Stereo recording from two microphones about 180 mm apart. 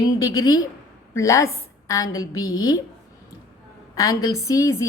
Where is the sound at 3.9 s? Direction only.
20° left (ahead or behind).